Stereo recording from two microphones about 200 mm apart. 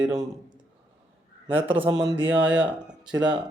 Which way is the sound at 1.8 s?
20° right (ahead or behind).